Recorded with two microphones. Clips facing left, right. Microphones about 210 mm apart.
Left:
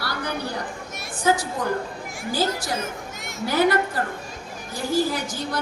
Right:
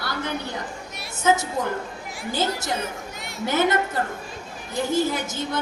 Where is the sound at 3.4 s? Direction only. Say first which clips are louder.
Left 1 dB; 20° right (ahead or behind).